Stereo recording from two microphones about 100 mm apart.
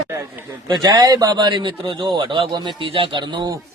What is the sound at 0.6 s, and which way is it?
A man's voice, 40° right (ahead or behind).